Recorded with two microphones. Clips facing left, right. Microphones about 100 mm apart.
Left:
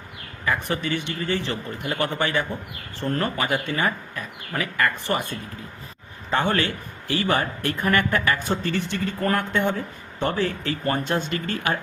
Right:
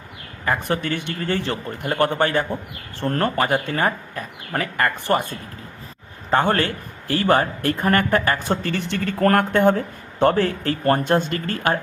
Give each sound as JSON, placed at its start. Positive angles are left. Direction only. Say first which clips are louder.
{"t": 0.4, "sound": "speech", "louder": "right 3 dB", "side_deg": -50}
{"t": 6.3, "sound": "speech", "louder": "right 4 dB", "side_deg": -45}
{"t": 8.4, "sound": "speech", "louder": "right 2 dB", "side_deg": -60}